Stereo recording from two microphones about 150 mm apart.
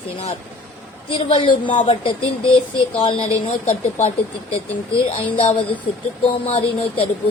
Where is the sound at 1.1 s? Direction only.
35° left (ahead or behind).